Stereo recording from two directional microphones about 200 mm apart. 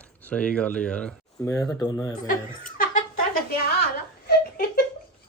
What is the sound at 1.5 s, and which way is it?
Speech, 15° left (ahead or behind).